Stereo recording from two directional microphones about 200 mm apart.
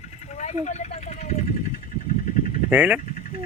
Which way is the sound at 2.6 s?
5° right (ahead or behind).